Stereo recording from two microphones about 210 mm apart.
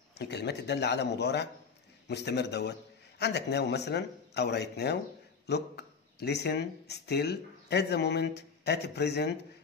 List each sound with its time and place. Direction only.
0.2 s a man's voice: 55° left (ahead or behind)